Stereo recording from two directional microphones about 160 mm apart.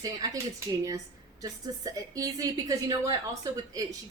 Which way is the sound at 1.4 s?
20° right (ahead or behind).